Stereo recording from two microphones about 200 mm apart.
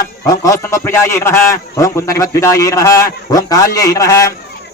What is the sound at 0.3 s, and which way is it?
A man's voice, 15° left (ahead or behind).